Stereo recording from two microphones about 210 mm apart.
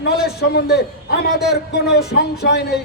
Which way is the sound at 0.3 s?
50° left (ahead or behind).